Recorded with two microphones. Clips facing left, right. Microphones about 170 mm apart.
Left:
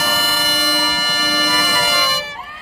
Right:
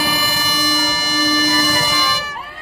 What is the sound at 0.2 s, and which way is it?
Music, 50° left (ahead or behind).